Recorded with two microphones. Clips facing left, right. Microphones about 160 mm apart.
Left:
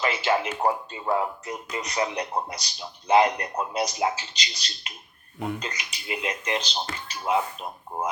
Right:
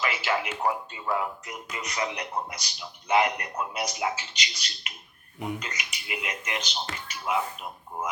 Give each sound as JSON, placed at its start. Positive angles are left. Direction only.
{"t": 0.0, "sound": "speech", "side_deg": 30}